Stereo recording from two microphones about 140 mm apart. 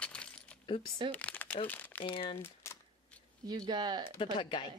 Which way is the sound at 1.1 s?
10° left (ahead or behind).